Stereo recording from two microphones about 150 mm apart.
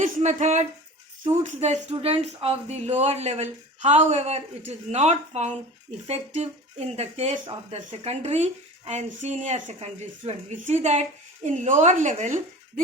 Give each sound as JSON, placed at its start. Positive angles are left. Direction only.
{"t": 0.0, "sound": "speech", "side_deg": -50}